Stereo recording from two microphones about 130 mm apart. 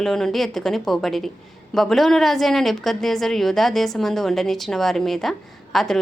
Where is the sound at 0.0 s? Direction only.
Centre (ahead or behind).